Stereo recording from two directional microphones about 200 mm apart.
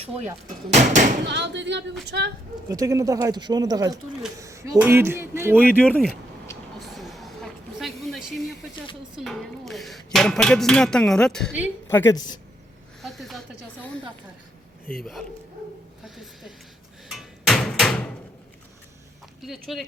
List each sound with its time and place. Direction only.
0.7 s speech: 40° right (ahead or behind)
1.2 s speech: 60° right (ahead or behind)
2.6 s speech: 15° right (ahead or behind)
5.6 s a woman's voice: 5° left (ahead or behind)
6.7 s a sound: centre (ahead or behind)
9.1 s a woman's voice: centre (ahead or behind); by 12.4 s 20° left (ahead or behind)
13.0 s a sound: centre (ahead or behind)
16.0 s a sound: centre (ahead or behind)
19.4 s speech: centre (ahead or behind)